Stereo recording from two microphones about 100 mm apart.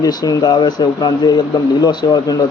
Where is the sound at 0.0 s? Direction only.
40° left (ahead or behind).